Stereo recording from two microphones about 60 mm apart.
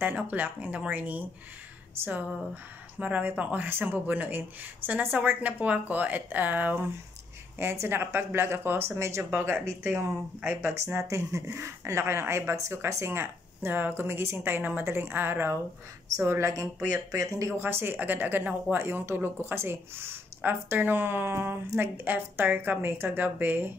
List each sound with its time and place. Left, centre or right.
0.0 s speech: right
7.5 s speech: right
9.4 s speech: right
11.0 s speech: right
11.4 s speech: right
16.2 s speech: right
17.6 s speech: right
18.8 s speech: right